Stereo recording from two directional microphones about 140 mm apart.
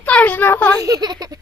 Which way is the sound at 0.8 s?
25° right (ahead or behind).